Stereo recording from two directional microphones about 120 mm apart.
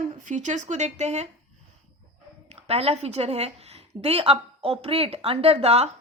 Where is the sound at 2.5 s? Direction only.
60° right (ahead or behind).